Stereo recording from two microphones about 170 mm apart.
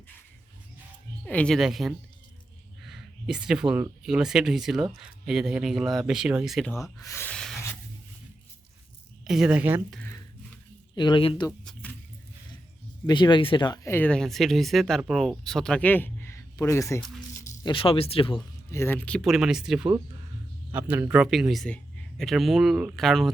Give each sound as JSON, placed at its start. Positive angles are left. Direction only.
{"t": 1.2, "sound": "speech", "side_deg": 5}
{"t": 7.0, "sound": "speech", "side_deg": 15}
{"t": 9.2, "sound": "speech", "side_deg": -5}
{"t": 10.9, "sound": "speech", "side_deg": 25}
{"t": 13.1, "sound": "speech", "side_deg": 25}
{"t": 13.9, "sound": "speech", "side_deg": 10}
{"t": 17.6, "sound": "speech", "side_deg": 30}
{"t": 18.7, "sound": "speech", "side_deg": 15}